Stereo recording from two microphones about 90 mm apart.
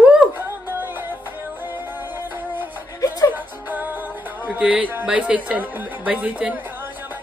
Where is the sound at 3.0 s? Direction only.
45° left (ahead or behind).